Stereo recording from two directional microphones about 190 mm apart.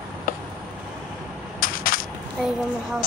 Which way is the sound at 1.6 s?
50° left (ahead or behind).